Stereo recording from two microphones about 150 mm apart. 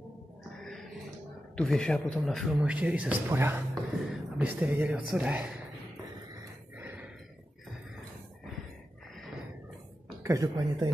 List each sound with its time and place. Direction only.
1.6 s speech: 5° left (ahead or behind)
6.8 s gasp: 10° right (ahead or behind)
10.2 s a woman's voice: 25° right (ahead or behind)